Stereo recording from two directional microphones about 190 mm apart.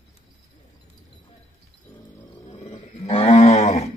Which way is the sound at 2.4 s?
30° left (ahead or behind).